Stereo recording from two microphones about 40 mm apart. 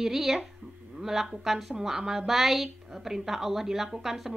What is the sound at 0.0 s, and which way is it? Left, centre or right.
A woman's voice, centre.